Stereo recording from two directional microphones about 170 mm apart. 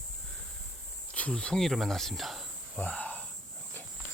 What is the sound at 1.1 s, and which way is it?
Speech, 5° left (ahead or behind).